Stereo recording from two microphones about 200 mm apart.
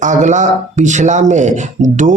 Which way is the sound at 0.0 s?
40° right (ahead or behind).